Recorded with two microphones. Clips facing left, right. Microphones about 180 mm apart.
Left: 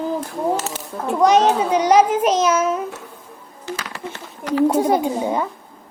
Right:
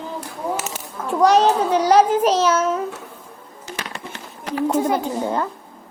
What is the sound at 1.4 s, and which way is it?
A child's voice, centre (ahead or behind).